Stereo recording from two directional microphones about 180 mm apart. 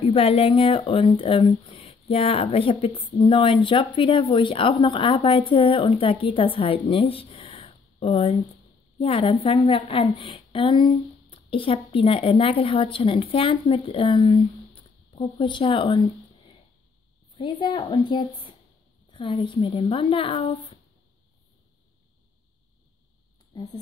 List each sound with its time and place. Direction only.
0.0 s a woman's voice: 35° left (ahead or behind)
17.4 s a woman's voice: 25° left (ahead or behind)
23.5 s speech: 20° left (ahead or behind)